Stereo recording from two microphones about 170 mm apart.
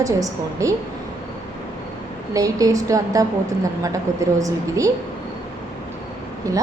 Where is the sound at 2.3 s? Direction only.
20° right (ahead or behind).